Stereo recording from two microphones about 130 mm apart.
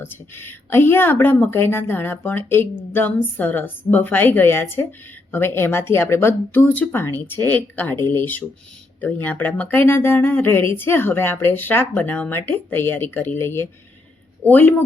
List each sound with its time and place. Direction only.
0.0 s speech: 15° left (ahead or behind)